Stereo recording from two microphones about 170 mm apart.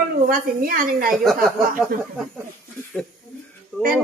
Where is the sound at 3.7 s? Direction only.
5° left (ahead or behind).